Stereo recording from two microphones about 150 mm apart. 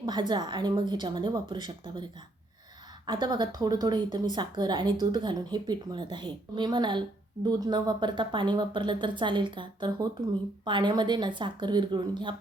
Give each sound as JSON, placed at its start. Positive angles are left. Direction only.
{"t": 0.0, "sound": "speech", "side_deg": -30}
{"t": 3.1, "sound": "speech", "side_deg": -30}